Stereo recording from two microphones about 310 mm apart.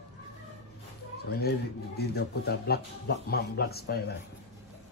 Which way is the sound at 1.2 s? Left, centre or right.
Left.